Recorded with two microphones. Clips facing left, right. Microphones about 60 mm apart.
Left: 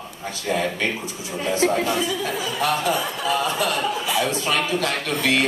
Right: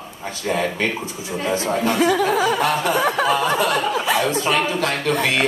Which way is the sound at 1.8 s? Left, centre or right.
Right.